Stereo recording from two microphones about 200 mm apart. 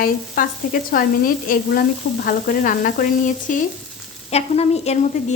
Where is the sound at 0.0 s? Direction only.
45° left (ahead or behind).